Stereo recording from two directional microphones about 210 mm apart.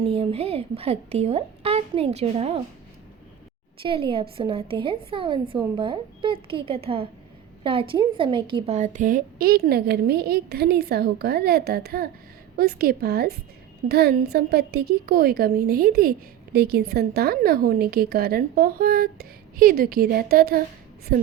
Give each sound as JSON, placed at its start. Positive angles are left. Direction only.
{"t": 0.0, "sound": "a woman's voice", "side_deg": -25}
{"t": 3.8, "sound": "a woman's voice", "side_deg": -25}